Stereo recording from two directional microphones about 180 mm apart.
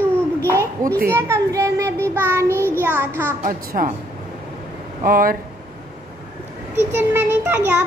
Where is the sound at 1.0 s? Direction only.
15° right (ahead or behind).